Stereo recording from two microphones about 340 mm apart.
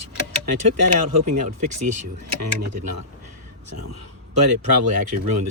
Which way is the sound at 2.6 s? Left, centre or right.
Right.